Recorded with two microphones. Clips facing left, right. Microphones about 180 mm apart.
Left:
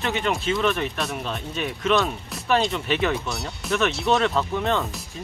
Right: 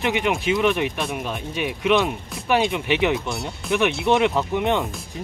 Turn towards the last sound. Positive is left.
turn(degrees=-15)  # may be behind; listen again after turning